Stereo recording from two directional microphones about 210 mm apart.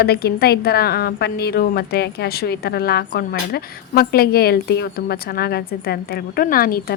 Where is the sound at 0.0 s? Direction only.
50° left (ahead or behind).